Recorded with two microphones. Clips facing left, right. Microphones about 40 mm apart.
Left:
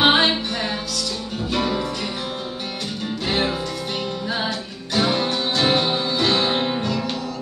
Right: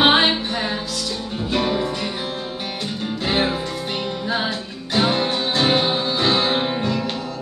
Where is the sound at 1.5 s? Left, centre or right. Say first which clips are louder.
Right 2 dB; centre.